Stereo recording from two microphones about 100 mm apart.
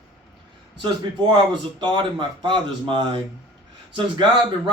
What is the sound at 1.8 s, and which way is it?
A man's voice, 50° right (ahead or behind).